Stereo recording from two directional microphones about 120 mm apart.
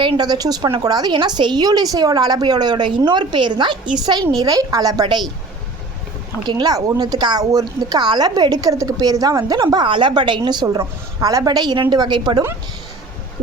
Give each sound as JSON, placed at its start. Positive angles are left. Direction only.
{"t": 0.0, "sound": "speech", "side_deg": -40}
{"t": 6.4, "sound": "speech", "side_deg": -35}